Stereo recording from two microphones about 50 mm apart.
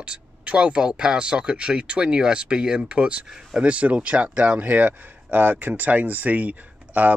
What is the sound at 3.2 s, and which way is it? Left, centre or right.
Speech, centre.